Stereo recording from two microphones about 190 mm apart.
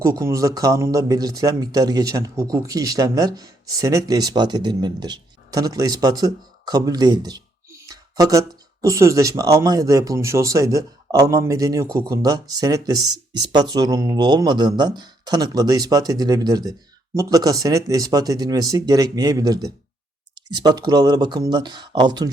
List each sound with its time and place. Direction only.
0.0 s speech: 15° right (ahead or behind)